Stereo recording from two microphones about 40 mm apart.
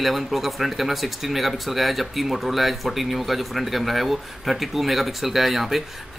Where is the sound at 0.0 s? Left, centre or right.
Centre.